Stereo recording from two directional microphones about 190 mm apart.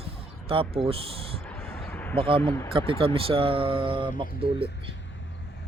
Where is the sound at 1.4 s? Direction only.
5° left (ahead or behind).